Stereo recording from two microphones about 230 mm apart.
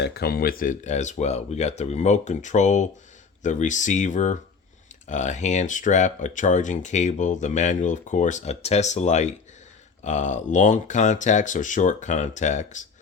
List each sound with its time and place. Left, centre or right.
0.0 s speech: left